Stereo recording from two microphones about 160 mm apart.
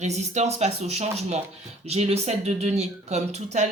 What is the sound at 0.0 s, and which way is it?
Speech, 45° right (ahead or behind).